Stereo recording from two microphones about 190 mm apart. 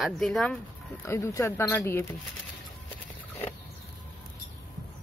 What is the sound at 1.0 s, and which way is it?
Speech, 15° left (ahead or behind).